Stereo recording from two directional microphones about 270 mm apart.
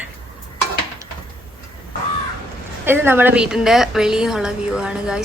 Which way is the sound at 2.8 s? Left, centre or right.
Centre.